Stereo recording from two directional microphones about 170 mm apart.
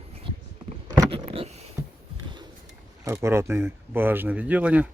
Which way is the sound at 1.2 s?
35° right (ahead or behind).